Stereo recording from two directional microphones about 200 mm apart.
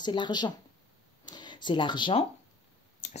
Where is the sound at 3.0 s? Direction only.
40° left (ahead or behind).